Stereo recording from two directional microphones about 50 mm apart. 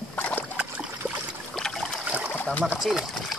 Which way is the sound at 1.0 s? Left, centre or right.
Right.